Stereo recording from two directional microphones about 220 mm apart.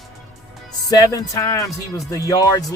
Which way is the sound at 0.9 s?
15° left (ahead or behind).